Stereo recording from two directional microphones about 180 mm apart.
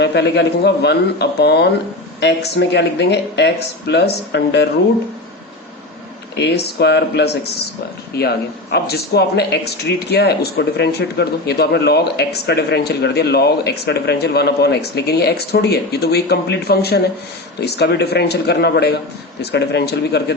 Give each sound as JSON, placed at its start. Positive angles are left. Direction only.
{"t": 0.0, "sound": "speech", "side_deg": 70}
{"t": 6.3, "sound": "speech", "side_deg": 70}